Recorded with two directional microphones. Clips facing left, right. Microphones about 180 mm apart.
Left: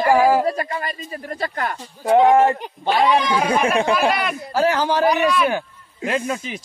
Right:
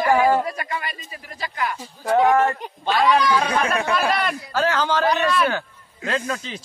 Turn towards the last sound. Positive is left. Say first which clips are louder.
# left 3 dB
turn(degrees=20)  # may be behind; listen again after turning